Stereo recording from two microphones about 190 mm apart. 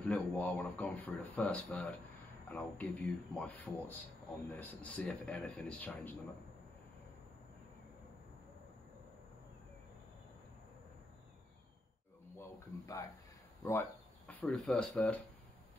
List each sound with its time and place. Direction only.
0.1 s speech: 5° left (ahead or behind)
12.4 s a sound: 15° left (ahead or behind)
13.6 s speech: 10° left (ahead or behind)